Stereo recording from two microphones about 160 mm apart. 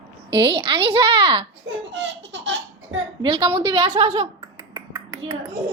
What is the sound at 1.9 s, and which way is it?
Baby laughter, 90° right.